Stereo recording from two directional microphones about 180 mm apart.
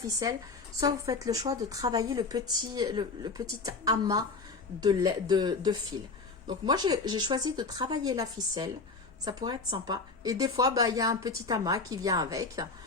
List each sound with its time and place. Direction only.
0.2 s a woman's voice: 20° right (ahead or behind)